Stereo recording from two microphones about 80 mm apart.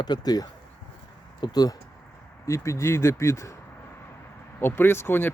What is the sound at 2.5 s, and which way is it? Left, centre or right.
Speech, left.